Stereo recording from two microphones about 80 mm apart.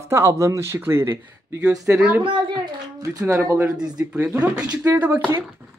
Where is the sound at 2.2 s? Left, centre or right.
Right.